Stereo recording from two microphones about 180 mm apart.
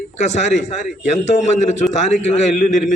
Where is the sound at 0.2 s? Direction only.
40° left (ahead or behind).